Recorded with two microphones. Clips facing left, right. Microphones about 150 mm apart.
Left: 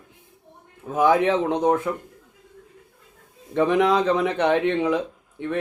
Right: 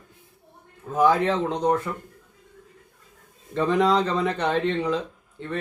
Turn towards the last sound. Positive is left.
turn(degrees=15)  # may be behind; listen again after turning